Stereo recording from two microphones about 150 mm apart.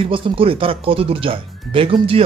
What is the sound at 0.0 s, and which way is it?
Speech, 35° right (ahead or behind).